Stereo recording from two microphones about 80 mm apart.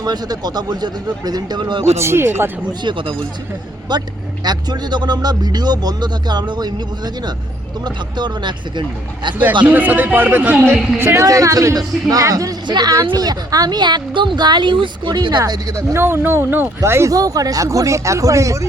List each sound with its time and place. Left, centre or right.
0.0 s speech: right
1.8 s speech: right
3.9 s speech: right
9.6 s a man's voice: right
11.0 s speech: right
12.6 s speech: right
13.1 s speech: right
15.1 s speech: right
17.2 s speech: right